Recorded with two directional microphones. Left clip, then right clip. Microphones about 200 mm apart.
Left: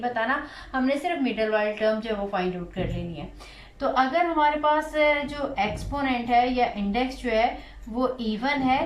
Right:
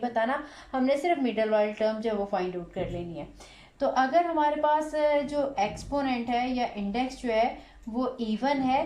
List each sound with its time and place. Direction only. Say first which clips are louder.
0.0 s a woman's voice: left 2 dB; 30° right (ahead or behind)